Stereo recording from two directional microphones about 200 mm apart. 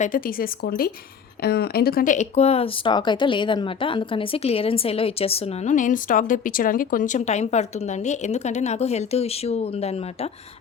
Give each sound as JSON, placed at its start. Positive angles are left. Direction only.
{"t": 0.0, "sound": "speech", "side_deg": 45}